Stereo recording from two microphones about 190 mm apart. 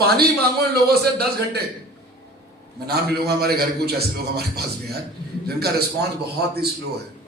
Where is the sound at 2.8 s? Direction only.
55° right (ahead or behind).